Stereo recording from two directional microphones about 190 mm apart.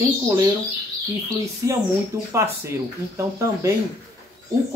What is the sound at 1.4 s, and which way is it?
Speech, 15° right (ahead or behind).